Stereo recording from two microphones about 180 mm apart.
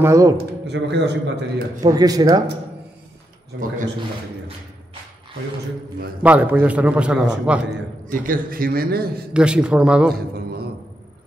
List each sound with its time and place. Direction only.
0.0 s a man's voice: 15° right (ahead or behind)
0.4 s speech: 70° right (ahead or behind)
1.8 s speech: 20° right (ahead or behind)
6.2 s a man's voice: 10° right (ahead or behind)
8.1 s a man's voice: 50° right (ahead or behind)
9.3 s speech: 5° right (ahead or behind)
10.3 s a sound: 60° right (ahead or behind)